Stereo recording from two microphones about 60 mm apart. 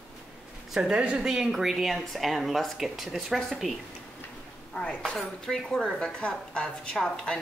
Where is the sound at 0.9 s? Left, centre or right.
Centre.